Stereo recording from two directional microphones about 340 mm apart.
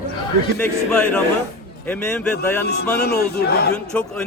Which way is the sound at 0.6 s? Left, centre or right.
Centre.